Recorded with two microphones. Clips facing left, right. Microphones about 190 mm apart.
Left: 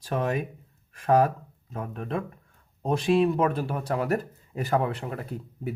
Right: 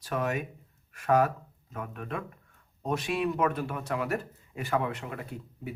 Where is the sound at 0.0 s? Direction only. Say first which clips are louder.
Left 3 dB; 30° left (ahead or behind).